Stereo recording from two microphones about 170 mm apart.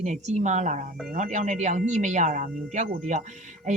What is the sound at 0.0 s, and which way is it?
A woman's voice, 45° right (ahead or behind).